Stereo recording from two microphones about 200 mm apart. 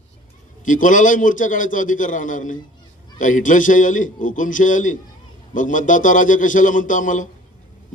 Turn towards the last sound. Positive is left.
turn(degrees=40)  # may be behind; listen again after turning